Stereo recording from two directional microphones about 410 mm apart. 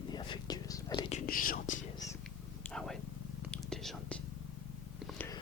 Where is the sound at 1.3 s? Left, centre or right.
Left.